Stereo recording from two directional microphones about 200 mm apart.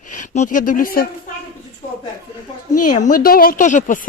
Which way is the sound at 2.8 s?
40° left (ahead or behind).